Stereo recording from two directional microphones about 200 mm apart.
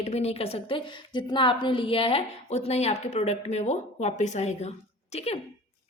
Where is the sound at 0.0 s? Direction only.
30° left (ahead or behind).